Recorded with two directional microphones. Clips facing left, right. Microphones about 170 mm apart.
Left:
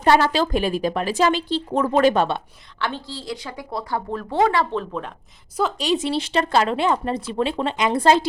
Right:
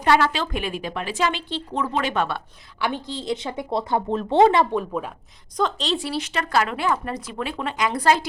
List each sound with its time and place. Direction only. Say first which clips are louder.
0.0 s speech: left 3 dB; 35° left (ahead or behind)
2.7 s a woman's voice: right 2 dB; 15° right (ahead or behind)
5.5 s speech: left 2 dB; 10° left (ahead or behind); by 8.3 s 25° left (ahead or behind)